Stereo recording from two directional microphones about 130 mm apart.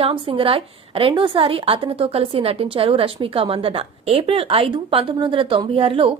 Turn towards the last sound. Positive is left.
turn(degrees=-45)  # may be behind; listen again after turning